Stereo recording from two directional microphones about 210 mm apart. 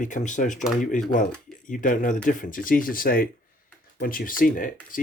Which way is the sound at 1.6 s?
40° left (ahead or behind).